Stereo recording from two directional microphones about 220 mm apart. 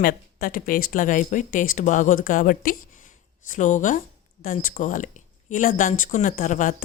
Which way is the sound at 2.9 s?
35° left (ahead or behind).